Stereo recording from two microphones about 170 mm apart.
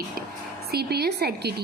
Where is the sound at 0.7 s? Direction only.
70° right (ahead or behind).